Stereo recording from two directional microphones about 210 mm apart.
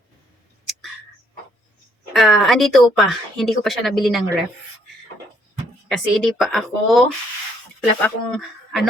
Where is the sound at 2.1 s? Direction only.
Centre (ahead or behind).